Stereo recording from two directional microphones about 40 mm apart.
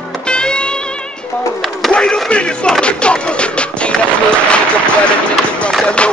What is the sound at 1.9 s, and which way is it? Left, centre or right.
Radio, left.